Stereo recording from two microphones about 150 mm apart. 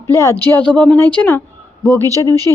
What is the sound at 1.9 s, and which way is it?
Speech, 20° right (ahead or behind).